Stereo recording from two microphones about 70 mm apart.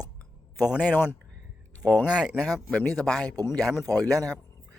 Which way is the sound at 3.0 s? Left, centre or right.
Centre.